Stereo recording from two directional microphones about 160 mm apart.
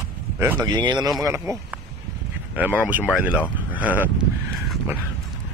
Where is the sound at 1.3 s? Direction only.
15° right (ahead or behind).